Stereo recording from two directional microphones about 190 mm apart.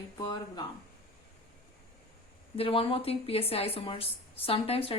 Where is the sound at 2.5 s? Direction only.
30° left (ahead or behind).